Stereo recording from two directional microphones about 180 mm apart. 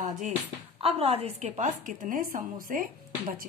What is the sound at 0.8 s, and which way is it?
A woman's voice, 35° right (ahead or behind).